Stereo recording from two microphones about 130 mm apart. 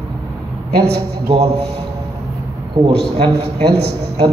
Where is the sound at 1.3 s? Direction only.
55° right (ahead or behind).